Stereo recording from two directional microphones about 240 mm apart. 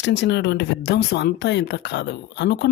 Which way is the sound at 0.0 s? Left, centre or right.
Left.